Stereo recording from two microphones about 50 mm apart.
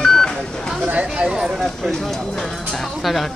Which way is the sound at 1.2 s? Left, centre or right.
Centre.